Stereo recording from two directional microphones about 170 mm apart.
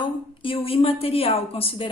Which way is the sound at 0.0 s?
30° left (ahead or behind).